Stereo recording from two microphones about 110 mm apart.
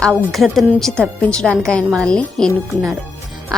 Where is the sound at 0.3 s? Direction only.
Centre (ahead or behind).